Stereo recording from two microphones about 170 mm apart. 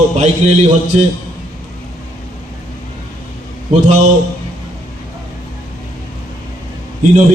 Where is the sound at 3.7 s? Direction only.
45° right (ahead or behind).